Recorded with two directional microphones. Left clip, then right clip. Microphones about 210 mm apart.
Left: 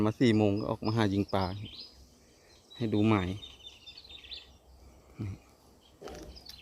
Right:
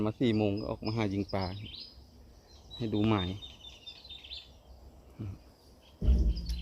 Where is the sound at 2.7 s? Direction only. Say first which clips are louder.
Left 2 dB; 20° left (ahead or behind).